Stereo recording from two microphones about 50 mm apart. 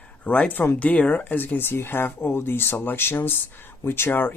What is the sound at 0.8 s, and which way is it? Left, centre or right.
Speech, left.